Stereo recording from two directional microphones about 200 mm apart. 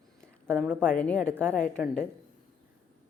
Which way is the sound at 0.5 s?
5° left (ahead or behind).